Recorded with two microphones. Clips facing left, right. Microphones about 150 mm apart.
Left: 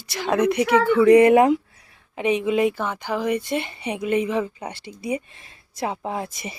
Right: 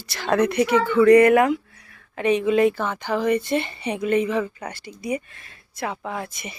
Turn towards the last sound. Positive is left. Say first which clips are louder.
# left 2 dB
turn(degrees=30)  # may be behind; listen again after turning